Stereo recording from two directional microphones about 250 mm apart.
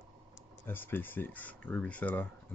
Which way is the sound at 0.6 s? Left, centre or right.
Centre.